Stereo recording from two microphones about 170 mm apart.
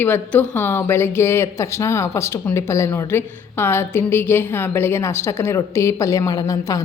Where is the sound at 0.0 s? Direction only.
10° left (ahead or behind).